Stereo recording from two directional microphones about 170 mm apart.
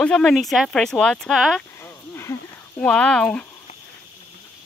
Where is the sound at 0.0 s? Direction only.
5° left (ahead or behind).